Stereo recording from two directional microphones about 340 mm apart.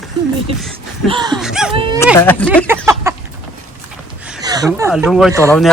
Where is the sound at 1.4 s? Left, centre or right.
Centre.